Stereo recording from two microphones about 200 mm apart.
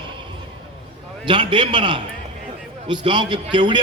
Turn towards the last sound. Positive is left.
turn(degrees=-25)  # may be behind; listen again after turning